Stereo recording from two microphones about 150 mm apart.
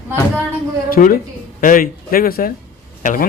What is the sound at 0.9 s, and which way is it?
A man's voice, 70° left (ahead or behind).